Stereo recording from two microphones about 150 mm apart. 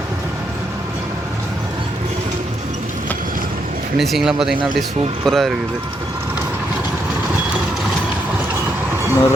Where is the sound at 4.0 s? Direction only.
Centre (ahead or behind).